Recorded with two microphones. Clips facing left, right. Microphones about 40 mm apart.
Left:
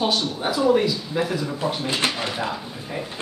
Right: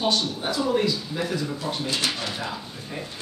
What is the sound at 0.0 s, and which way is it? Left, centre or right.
Speech, centre.